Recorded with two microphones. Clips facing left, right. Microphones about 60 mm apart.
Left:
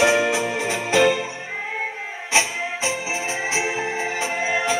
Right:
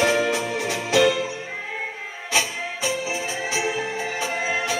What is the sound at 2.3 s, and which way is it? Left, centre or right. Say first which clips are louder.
Music: left 3 dB; centre.